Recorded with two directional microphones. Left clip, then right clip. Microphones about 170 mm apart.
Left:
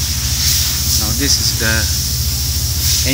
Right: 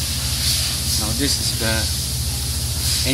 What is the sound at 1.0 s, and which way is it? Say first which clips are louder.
Speech: left 6 dB; 5° right (ahead or behind).